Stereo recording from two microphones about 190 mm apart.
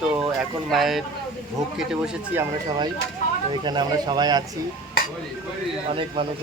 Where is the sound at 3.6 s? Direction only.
25° right (ahead or behind).